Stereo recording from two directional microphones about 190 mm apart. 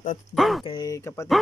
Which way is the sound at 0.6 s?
20° left (ahead or behind).